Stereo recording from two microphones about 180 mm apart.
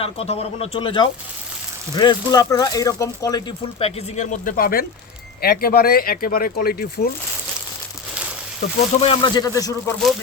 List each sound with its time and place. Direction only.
0.0 s speech: 35° left (ahead or behind); by 3.4 s 20° left (ahead or behind)
3.8 s speech: 35° left (ahead or behind); by 7.1 s 60° left (ahead or behind)
8.9 s speech: 30° left (ahead or behind)